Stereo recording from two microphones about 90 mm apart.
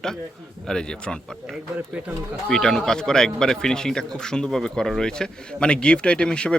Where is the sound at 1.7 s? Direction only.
20° right (ahead or behind).